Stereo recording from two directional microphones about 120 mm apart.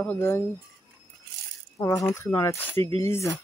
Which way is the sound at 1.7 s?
25° left (ahead or behind).